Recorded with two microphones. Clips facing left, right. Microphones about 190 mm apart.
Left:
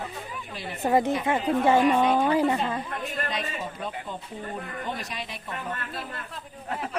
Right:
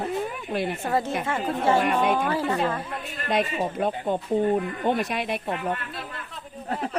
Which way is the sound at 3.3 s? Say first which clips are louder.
Right 8 dB; 55° right (ahead or behind).